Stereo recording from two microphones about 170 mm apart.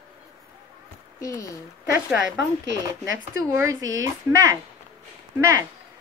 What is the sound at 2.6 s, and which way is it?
Speech, 90° right.